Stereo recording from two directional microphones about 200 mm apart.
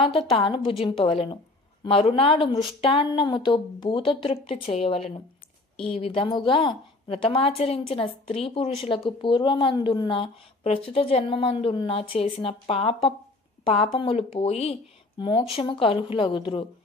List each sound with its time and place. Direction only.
0.3 s a woman's voice: 25° left (ahead or behind)